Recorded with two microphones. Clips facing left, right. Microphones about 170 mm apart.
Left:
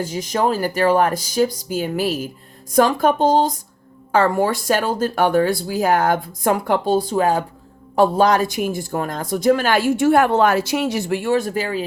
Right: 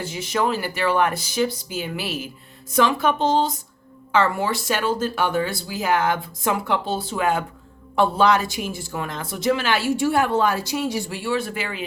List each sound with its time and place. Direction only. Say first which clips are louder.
0.0 s speech: left 3 dB; 40° left (ahead or behind); by 11.2 s 70° left (ahead or behind)
11.2 s speech: left 5 dB; 45° left (ahead or behind)